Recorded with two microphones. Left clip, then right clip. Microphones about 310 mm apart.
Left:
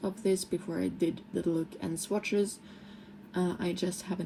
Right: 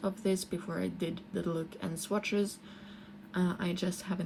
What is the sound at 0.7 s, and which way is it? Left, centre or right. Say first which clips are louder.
Speech: left 1 dB; right.